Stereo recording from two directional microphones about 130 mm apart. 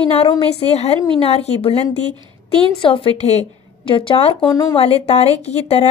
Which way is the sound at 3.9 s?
45° left (ahead or behind).